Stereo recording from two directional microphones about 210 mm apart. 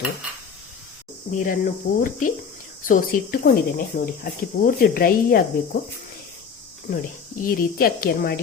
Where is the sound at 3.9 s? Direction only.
30° left (ahead or behind).